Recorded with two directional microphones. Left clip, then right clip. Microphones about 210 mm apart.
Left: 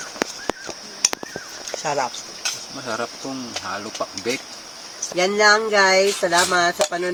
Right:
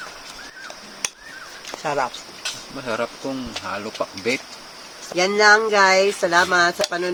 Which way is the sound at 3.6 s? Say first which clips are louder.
Right 1 dB; 35° right (ahead or behind).